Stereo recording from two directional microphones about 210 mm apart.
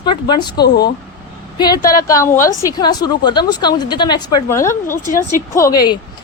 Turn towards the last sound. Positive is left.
turn(degrees=20)  # may be behind; listen again after turning